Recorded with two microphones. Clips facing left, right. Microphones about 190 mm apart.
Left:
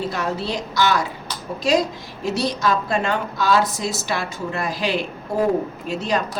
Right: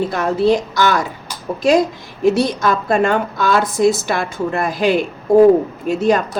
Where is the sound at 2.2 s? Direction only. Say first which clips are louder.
Right 7 dB; 55° right (ahead or behind).